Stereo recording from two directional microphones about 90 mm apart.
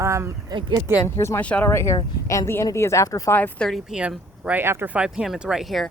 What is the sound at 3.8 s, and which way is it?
Speech, 10° right (ahead or behind).